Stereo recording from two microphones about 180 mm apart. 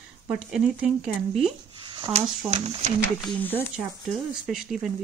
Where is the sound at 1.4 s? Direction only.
30° right (ahead or behind).